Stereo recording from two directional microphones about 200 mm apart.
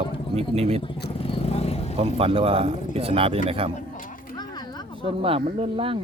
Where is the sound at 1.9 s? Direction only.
30° right (ahead or behind).